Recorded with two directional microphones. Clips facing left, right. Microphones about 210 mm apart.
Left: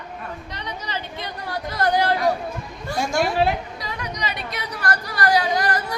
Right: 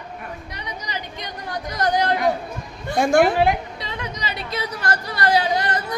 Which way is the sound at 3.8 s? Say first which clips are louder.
Left 1 dB; 25° right (ahead or behind).